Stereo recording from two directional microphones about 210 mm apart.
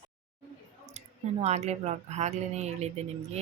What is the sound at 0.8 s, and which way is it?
Speech, 30° right (ahead or behind).